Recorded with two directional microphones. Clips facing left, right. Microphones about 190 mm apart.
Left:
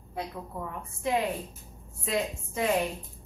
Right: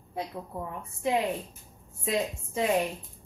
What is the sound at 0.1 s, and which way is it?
A woman's voice, 25° right (ahead or behind).